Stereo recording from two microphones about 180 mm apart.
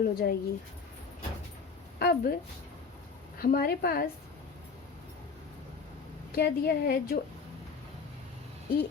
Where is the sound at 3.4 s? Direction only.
55° left (ahead or behind).